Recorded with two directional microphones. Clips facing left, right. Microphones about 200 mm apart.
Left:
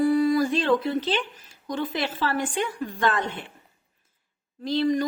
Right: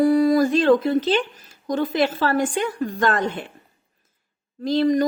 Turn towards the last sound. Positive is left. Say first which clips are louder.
# right 4 dB
turn(degrees=-45)  # may be behind; listen again after turning